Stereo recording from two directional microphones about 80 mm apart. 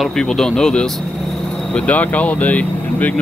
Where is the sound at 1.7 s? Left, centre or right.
Centre.